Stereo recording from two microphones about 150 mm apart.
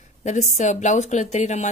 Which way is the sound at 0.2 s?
50° left (ahead or behind).